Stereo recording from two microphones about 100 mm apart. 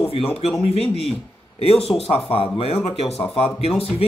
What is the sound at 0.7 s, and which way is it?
Speech, 90° left.